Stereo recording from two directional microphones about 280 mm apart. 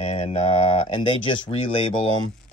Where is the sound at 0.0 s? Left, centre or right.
Left.